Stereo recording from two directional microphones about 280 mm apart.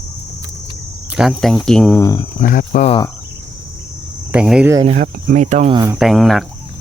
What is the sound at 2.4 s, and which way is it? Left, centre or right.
Speech, left.